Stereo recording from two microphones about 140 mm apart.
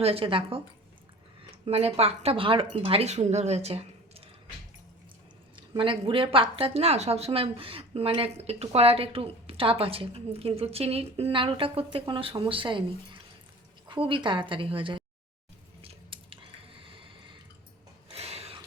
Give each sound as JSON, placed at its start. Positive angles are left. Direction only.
{"t": 0.0, "sound": "a woman's voice", "side_deg": -40}
{"t": 5.5, "sound": "a woman's voice", "side_deg": -35}
{"t": 13.8, "sound": "a woman's voice", "side_deg": -35}
{"t": 15.8, "sound": "squish", "side_deg": -40}
{"t": 18.1, "sound": "a sound", "side_deg": -45}